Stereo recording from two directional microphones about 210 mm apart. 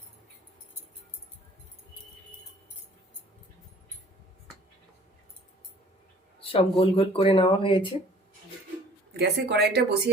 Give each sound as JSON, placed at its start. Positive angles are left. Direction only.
{"t": 6.4, "sound": "speech", "side_deg": 25}
{"t": 9.1, "sound": "speech", "side_deg": -50}